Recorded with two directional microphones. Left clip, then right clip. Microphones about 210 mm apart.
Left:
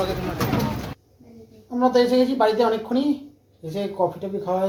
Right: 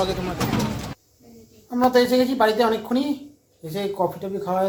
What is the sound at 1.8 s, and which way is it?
A woman's voice, 20° right (ahead or behind).